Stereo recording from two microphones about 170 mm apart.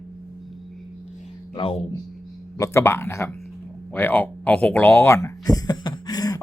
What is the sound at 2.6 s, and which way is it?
Speech, 15° left (ahead or behind).